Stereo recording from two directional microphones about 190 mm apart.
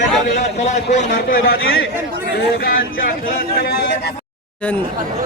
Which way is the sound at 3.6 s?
60° left (ahead or behind).